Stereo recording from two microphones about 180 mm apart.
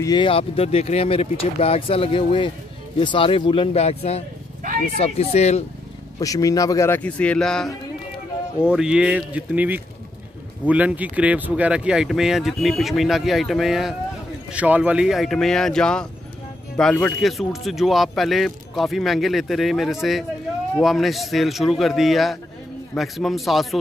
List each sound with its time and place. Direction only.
0.0 s speech: 25° left (ahead or behind)
6.1 s speech: 20° left (ahead or behind); by 23.8 s centre (ahead or behind)